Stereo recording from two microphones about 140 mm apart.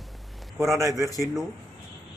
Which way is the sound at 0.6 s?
20° right (ahead or behind).